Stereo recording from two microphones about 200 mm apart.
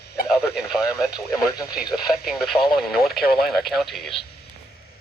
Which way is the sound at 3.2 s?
50° left (ahead or behind).